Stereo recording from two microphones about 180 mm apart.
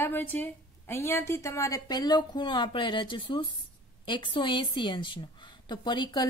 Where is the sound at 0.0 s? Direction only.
10° left (ahead or behind).